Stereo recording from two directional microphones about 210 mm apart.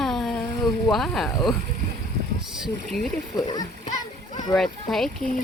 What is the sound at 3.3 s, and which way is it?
Speech, 20° left (ahead or behind).